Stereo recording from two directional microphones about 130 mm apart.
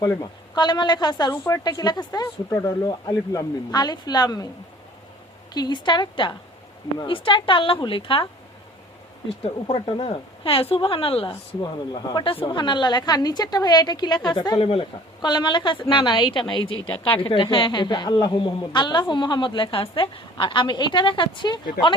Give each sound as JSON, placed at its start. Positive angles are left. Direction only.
{"t": 0.0, "sound": "a woman's voice", "side_deg": 30}
{"t": 1.3, "sound": "a woman's voice", "side_deg": 20}
{"t": 5.5, "sound": "a woman's voice", "side_deg": 35}
{"t": 9.4, "sound": "a woman's voice", "side_deg": 45}
{"t": 14.6, "sound": "a woman's voice", "side_deg": 45}